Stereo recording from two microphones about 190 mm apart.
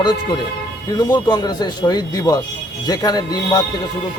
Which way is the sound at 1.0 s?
20° left (ahead or behind).